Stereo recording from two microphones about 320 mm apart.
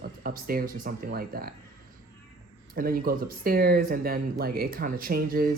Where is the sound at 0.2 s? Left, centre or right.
Right.